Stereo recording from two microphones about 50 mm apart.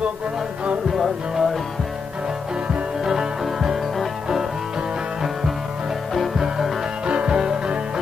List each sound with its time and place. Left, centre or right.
0.9 s music: centre
3.1 s music: centre
6.1 s music: centre
7.1 s music: right
7.3 s music: centre